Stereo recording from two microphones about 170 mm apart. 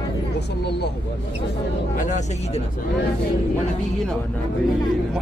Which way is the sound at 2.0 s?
45° left (ahead or behind).